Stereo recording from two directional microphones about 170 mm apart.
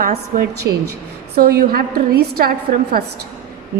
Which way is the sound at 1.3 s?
65° right (ahead or behind).